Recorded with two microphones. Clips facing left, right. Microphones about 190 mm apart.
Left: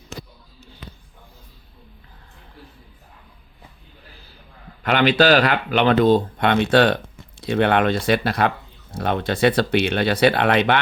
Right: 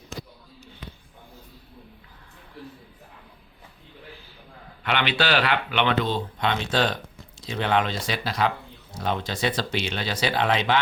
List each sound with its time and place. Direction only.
4.8 s speech: 45° left (ahead or behind); by 10.8 s 60° left (ahead or behind)